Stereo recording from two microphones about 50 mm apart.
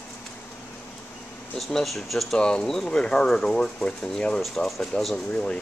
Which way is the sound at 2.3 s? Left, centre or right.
Centre.